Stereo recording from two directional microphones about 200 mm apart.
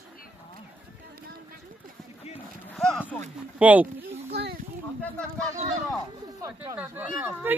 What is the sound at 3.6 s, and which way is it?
Speech, 10° right (ahead or behind).